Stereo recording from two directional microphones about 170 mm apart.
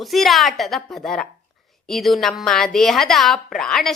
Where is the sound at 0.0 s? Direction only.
Centre (ahead or behind).